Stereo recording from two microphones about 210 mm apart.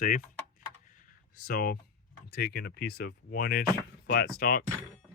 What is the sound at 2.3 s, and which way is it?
Speech, 50° left (ahead or behind).